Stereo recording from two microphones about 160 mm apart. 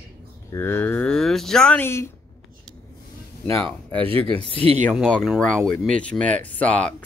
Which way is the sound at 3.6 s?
10° left (ahead or behind).